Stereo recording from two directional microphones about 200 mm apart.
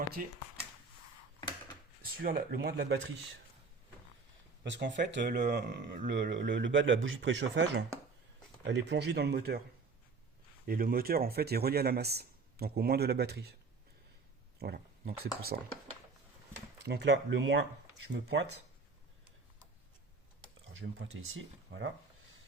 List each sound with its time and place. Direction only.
0.2 s speech: 45° right (ahead or behind)
2.0 s speech: 50° right (ahead or behind)
4.6 s speech: 65° right (ahead or behind)
5.4 s speech: 40° right (ahead or behind)
6.1 s speech: 60° right (ahead or behind)
10.7 s speech: 45° right (ahead or behind)
14.6 s a sound: 50° right (ahead or behind)
15.5 s speech: 55° right (ahead or behind)
16.8 s speech: 55° right (ahead or behind)
20.7 s speech: 70° right (ahead or behind)